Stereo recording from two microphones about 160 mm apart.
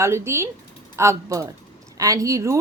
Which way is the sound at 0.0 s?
15° right (ahead or behind).